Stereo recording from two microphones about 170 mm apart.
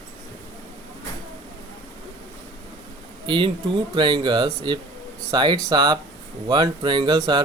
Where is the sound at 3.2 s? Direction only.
30° right (ahead or behind).